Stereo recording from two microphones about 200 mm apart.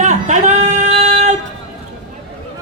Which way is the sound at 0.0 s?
35° right (ahead or behind).